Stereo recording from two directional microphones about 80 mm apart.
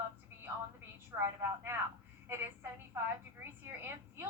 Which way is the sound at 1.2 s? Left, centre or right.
Right.